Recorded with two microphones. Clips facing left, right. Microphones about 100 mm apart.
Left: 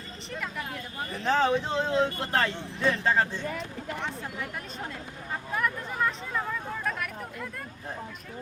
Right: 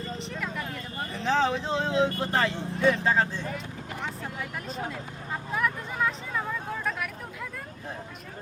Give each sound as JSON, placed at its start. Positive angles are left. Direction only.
{"t": 0.3, "sound": "speech", "side_deg": 0}
{"t": 5.5, "sound": "vehicle", "side_deg": 0}